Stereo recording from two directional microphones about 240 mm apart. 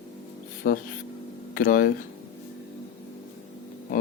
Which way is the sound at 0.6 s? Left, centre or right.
Left.